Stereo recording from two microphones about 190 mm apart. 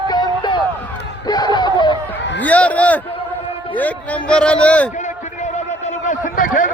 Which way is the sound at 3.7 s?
10° left (ahead or behind).